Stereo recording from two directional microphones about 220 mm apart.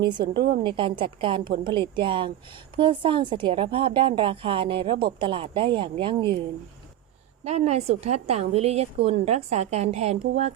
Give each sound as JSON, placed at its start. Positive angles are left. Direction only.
{"t": 0.0, "sound": "a woman's voice", "side_deg": -20}
{"t": 7.4, "sound": "a woman's voice", "side_deg": -30}